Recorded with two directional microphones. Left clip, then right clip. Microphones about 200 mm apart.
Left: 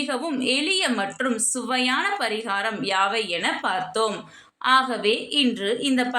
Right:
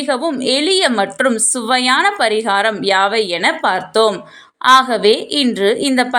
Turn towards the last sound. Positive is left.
turn(degrees=-40)  # may be behind; listen again after turning